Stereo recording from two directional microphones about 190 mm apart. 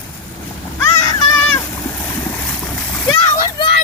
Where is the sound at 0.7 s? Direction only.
15° left (ahead or behind).